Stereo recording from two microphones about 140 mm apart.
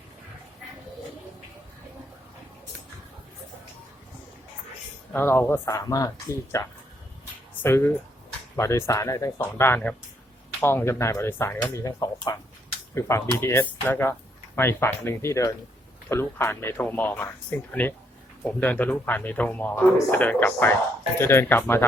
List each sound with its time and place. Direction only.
5.1 s speech: 15° left (ahead or behind)